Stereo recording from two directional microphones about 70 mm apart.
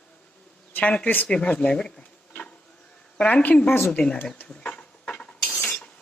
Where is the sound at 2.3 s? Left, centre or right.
Centre.